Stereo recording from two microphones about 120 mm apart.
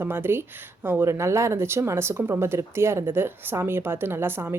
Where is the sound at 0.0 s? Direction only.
20° right (ahead or behind).